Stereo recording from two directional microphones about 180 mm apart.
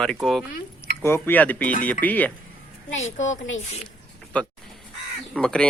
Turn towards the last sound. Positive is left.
turn(degrees=5)  # may be behind; listen again after turning